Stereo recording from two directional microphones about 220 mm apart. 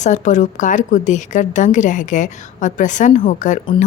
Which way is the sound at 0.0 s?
35° left (ahead or behind).